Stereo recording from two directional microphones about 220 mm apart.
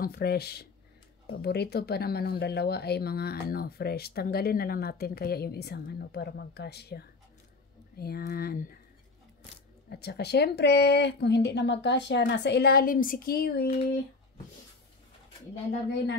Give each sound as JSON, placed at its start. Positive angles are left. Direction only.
{"t": 0.0, "sound": "speech", "side_deg": 45}
{"t": 9.8, "sound": "speech", "side_deg": 50}